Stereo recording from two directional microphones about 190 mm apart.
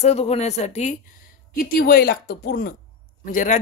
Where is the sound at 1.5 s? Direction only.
50° left (ahead or behind).